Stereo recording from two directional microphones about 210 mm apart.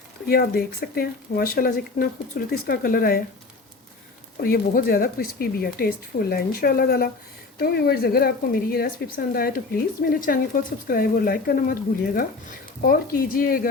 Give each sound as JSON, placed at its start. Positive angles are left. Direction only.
{"t": 0.3, "sound": "speech", "side_deg": 45}
{"t": 4.4, "sound": "speech", "side_deg": 45}